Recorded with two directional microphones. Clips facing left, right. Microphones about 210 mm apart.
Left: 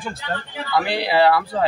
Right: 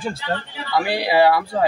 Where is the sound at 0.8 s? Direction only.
10° right (ahead or behind).